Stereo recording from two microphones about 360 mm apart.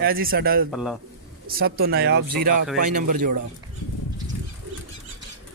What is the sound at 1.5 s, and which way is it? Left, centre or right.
Speech, right.